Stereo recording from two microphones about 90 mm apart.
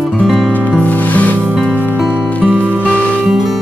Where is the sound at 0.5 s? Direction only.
15° left (ahead or behind).